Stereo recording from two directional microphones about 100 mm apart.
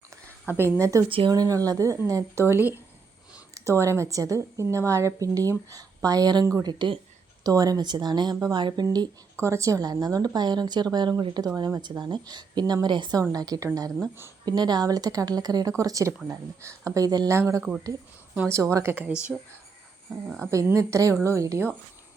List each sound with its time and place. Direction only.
0.5 s a woman's voice: 25° right (ahead or behind)
6.7 s a woman's voice: 50° right (ahead or behind)
7.4 s a woman's voice: 40° right (ahead or behind)
9.3 s a woman's voice: 30° right (ahead or behind)
17.3 s a woman's voice: 30° right (ahead or behind)
19.0 s speech: 10° right (ahead or behind)
20.5 s a woman's voice: 30° right (ahead or behind)